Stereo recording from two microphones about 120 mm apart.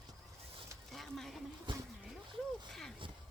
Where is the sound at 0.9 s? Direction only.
Centre (ahead or behind).